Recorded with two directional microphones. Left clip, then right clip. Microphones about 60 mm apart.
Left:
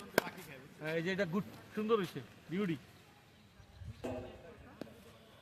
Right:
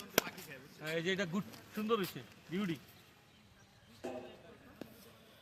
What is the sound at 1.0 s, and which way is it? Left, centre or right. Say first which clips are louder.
Speech: even; left.